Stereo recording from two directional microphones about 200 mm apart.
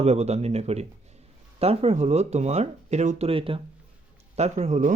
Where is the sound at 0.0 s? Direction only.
30° right (ahead or behind).